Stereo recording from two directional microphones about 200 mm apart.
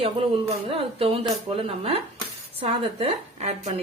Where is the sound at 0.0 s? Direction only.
30° right (ahead or behind).